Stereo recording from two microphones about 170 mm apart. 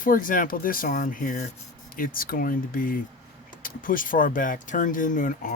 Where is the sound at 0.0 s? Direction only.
55° left (ahead or behind).